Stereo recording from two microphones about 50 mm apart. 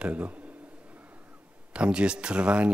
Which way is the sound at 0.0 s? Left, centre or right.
Right.